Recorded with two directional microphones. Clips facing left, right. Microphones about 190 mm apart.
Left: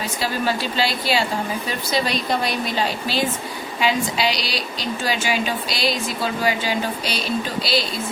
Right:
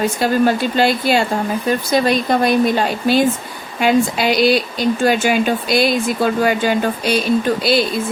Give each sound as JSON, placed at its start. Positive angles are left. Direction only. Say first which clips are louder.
{"t": 0.0, "sound": "speech", "louder": "right 9 dB", "side_deg": -50}